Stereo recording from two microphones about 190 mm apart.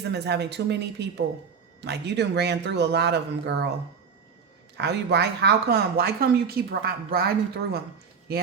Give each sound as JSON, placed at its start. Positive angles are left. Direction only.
{"t": 0.0, "sound": "speech", "side_deg": -65}
{"t": 4.8, "sound": "speech", "side_deg": -60}